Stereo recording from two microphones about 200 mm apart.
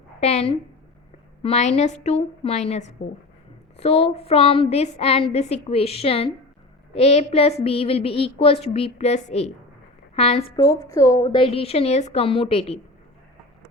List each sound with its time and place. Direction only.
0.2 s a woman's voice: 35° left (ahead or behind)
10.6 s a woman's voice: 15° left (ahead or behind)